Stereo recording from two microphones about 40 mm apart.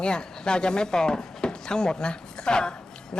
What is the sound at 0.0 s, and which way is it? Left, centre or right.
Speech, left.